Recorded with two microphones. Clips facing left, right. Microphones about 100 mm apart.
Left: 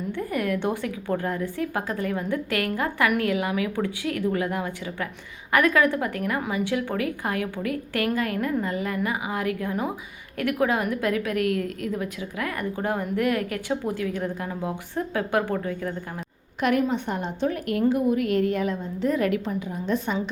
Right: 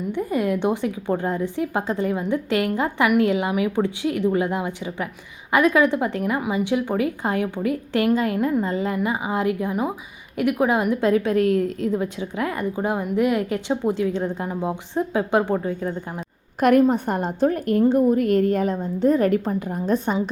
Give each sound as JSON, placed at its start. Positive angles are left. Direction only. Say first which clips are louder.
{"t": 0.1, "sound": "a woman's voice", "louder": "right 4 dB", "side_deg": -20}
{"t": 16.6, "sound": "a woman's voice", "louder": "right 7 dB", "side_deg": -45}